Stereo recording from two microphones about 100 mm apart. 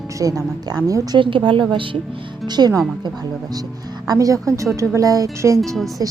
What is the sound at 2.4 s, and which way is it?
A woman's voice, 45° right (ahead or behind).